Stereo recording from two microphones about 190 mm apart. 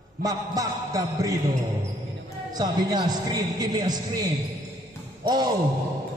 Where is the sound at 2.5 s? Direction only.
20° right (ahead or behind).